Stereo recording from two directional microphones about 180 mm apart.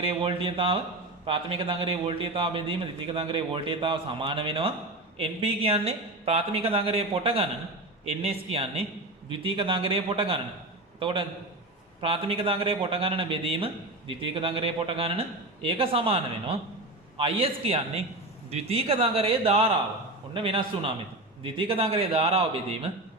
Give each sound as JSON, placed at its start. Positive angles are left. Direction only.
{"t": 0.0, "sound": "a man's voice", "side_deg": -30}